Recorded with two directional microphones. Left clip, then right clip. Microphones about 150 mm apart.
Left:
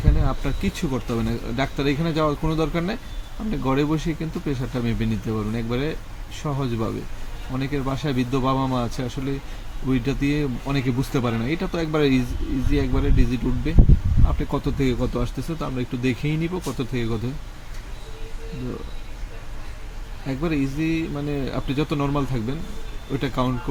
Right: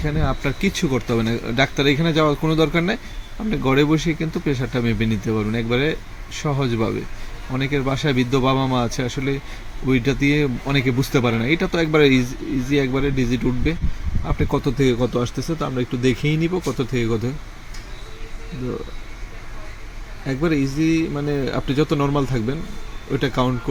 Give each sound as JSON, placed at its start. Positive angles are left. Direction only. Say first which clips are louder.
{"t": 0.0, "sound": "speech", "louder": "right 4 dB", "side_deg": -35}
{"t": 20.2, "sound": "speech", "louder": "right 4 dB", "side_deg": -25}